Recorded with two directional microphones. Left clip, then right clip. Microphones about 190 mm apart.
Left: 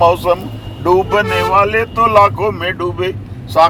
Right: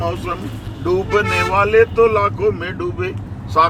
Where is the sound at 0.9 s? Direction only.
50° left (ahead or behind).